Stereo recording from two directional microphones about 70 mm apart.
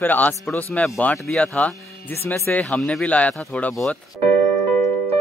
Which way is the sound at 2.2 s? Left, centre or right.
Left.